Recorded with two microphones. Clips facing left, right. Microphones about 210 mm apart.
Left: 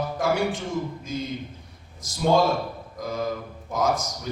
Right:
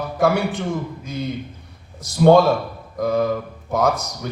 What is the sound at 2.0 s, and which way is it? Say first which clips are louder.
Speech: right 8 dB; 65° right (ahead or behind).